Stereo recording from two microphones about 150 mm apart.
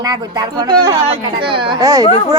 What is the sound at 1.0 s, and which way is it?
Speech, 40° right (ahead or behind).